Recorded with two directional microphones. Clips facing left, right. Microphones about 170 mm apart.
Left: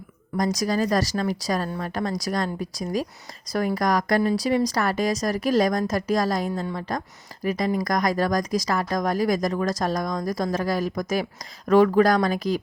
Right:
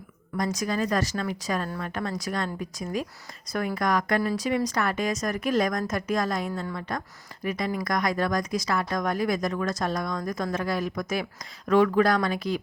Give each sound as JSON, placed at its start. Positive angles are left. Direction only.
{"t": 0.3, "sound": "speech", "side_deg": 40}